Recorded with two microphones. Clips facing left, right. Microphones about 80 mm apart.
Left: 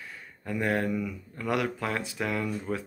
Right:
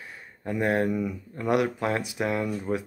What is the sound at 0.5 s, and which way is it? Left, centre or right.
Speech, right.